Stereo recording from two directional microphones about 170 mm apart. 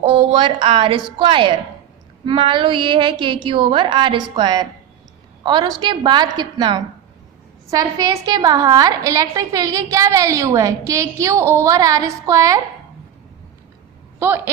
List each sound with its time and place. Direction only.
0.0 s a woman's voice: 30° right (ahead or behind)
14.2 s speech: 10° right (ahead or behind)